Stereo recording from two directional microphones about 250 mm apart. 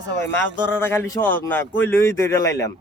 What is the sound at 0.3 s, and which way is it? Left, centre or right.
Speech, centre.